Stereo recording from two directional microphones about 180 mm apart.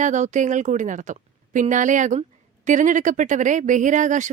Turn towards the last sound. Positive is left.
turn(degrees=-45)  # may be behind; listen again after turning